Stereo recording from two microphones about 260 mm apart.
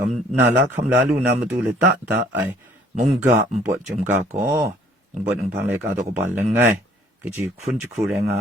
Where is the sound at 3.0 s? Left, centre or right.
Centre.